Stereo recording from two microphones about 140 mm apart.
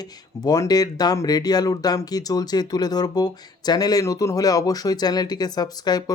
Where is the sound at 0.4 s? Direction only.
25° left (ahead or behind).